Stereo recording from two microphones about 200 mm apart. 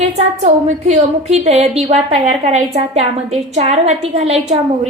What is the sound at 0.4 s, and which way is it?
A woman's voice, 35° right (ahead or behind).